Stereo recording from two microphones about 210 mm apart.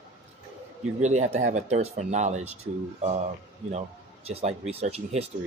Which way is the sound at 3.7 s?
30° right (ahead or behind).